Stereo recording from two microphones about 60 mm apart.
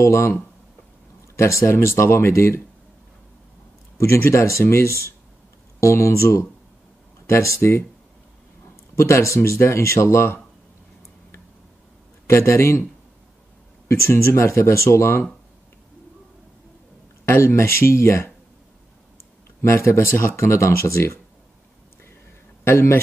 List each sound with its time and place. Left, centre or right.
0.0 s speech: left
4.0 s speech: left
8.9 s speech: left
12.3 s speech: left
13.8 s speech: left
17.3 s speech: left
19.6 s speech: left
22.7 s speech: left